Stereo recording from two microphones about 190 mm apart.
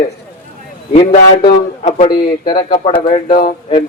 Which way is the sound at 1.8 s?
40° left (ahead or behind).